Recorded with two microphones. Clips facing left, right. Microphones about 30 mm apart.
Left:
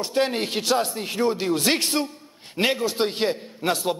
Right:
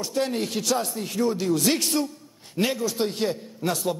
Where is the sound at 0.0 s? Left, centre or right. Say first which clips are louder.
Left 3 dB; left.